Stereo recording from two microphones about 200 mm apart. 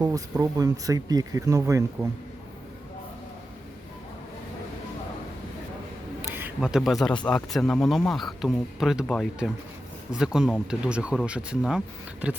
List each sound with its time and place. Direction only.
0.0 s speech: 15° right (ahead or behind)
6.3 s speech: 5° right (ahead or behind)